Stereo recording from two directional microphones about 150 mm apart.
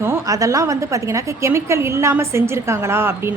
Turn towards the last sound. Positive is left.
turn(degrees=-15)  # may be behind; listen again after turning